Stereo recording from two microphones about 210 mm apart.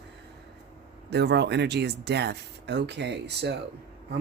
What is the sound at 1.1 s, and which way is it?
Speech, 55° right (ahead or behind).